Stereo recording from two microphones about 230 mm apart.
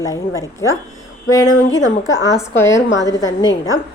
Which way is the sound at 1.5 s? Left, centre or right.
Left.